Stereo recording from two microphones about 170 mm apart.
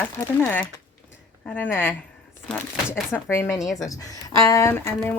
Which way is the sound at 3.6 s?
Centre (ahead or behind).